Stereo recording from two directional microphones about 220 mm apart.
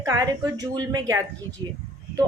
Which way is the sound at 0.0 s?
15° right (ahead or behind).